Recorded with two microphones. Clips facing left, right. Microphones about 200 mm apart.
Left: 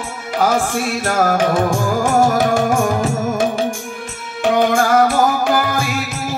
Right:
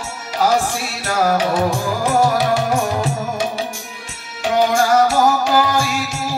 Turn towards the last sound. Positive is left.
turn(degrees=55)  # may be behind; listen again after turning